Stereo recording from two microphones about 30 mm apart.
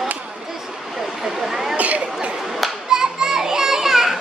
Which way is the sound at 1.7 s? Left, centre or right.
Right.